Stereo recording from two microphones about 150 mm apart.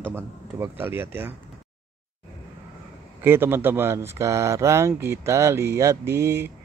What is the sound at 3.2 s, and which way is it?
Speech, 15° right (ahead or behind).